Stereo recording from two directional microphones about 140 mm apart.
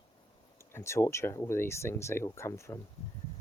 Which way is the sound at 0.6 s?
20° left (ahead or behind).